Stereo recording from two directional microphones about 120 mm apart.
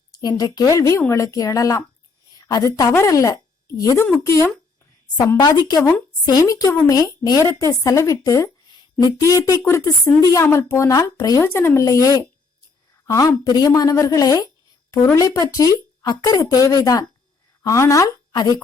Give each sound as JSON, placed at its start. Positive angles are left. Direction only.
{"t": 0.1, "sound": "speech", "side_deg": 35}
{"t": 2.4, "sound": "a sound", "side_deg": 30}
{"t": 2.9, "sound": "a woman's voice", "side_deg": 25}